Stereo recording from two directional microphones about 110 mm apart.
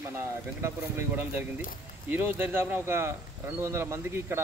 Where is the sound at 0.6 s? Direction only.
25° right (ahead or behind).